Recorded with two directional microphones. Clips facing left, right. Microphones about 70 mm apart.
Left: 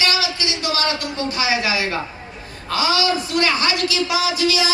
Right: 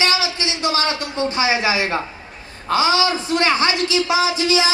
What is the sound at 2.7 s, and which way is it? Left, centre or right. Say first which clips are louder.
Music: right 2 dB; right.